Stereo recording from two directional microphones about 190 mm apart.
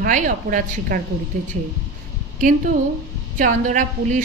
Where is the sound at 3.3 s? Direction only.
45° right (ahead or behind).